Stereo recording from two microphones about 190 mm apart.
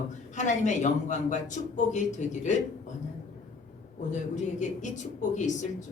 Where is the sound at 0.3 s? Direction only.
40° left (ahead or behind).